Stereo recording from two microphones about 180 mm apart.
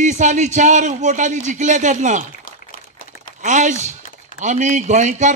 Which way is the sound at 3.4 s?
45° right (ahead or behind).